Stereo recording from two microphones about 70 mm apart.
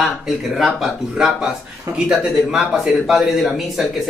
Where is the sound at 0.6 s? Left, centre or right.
Centre.